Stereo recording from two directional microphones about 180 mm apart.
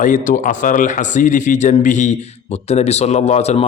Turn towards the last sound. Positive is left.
turn(degrees=35)  # may be behind; listen again after turning